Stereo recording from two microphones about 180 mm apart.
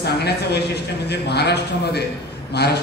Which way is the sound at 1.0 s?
65° left (ahead or behind).